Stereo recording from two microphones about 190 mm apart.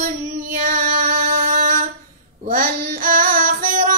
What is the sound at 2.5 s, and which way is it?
Child singing, 45° right (ahead or behind).